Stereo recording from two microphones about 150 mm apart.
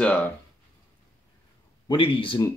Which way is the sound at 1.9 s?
35° left (ahead or behind).